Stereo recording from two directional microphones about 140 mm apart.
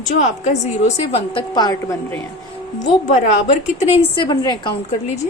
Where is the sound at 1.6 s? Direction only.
25° left (ahead or behind).